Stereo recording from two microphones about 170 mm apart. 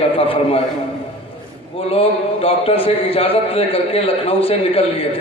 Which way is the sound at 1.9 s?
35° left (ahead or behind).